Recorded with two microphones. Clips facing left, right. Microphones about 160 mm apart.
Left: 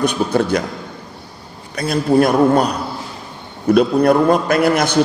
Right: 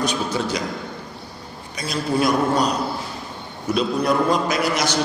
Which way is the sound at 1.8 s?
55° left (ahead or behind).